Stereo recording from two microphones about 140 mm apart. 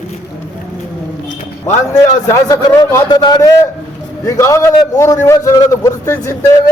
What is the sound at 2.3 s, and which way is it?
A man's voice, 25° left (ahead or behind).